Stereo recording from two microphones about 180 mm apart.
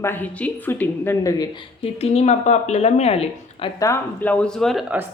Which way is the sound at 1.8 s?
35° left (ahead or behind).